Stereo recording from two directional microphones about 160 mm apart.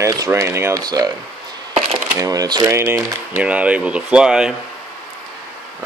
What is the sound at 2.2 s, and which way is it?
Speech, 20° right (ahead or behind).